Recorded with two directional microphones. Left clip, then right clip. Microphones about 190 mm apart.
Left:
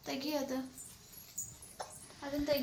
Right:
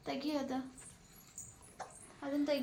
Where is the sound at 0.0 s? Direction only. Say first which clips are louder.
Left 1 dB; 60° right (ahead or behind).